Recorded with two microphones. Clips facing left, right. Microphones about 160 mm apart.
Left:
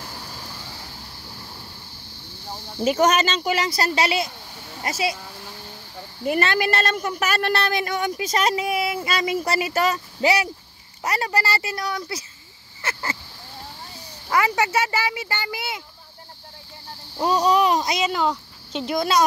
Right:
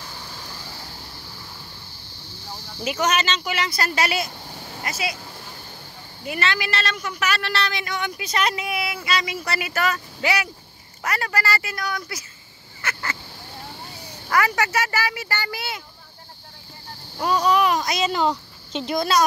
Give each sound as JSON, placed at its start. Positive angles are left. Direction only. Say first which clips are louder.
{"t": 2.8, "sound": "speech", "louder": "left 5 dB", "side_deg": 40}
{"t": 4.8, "sound": "speech", "louder": "left 4 dB", "side_deg": 35}
{"t": 6.2, "sound": "a woman's voice", "louder": "left 5 dB", "side_deg": 50}
{"t": 14.3, "sound": "speech", "louder": "left 1 dB", "side_deg": 20}
{"t": 17.2, "sound": "speech", "louder": "left 1 dB", "side_deg": 35}
{"t": 17.9, "sound": "speech", "louder": "right 1 dB", "side_deg": 10}